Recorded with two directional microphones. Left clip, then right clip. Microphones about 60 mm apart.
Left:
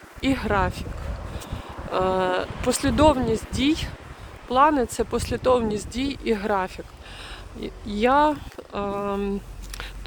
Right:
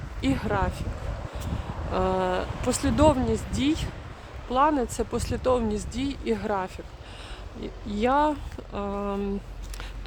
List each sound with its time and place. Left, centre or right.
0.3 s speech: left
1.9 s speech: left
4.4 s speech: left
5.4 s speech: left
5.9 s speech: left